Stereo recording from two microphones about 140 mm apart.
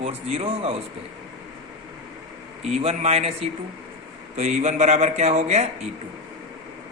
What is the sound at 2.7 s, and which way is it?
Speech, 50° right (ahead or behind).